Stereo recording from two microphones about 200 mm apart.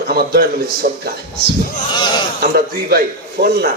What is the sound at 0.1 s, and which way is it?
Speech, 50° right (ahead or behind).